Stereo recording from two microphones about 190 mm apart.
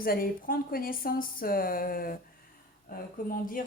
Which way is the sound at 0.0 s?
50° left (ahead or behind).